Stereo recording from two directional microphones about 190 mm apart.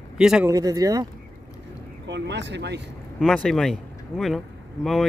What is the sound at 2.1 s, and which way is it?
Speech, 65° right (ahead or behind).